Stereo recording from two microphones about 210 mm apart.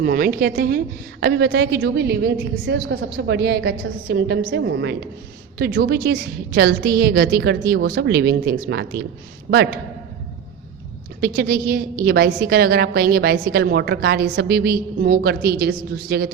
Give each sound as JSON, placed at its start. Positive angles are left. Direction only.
{"t": 0.0, "sound": "a woman's voice", "side_deg": -45}
{"t": 5.5, "sound": "a woman's voice", "side_deg": -45}
{"t": 11.2, "sound": "a woman's voice", "side_deg": -45}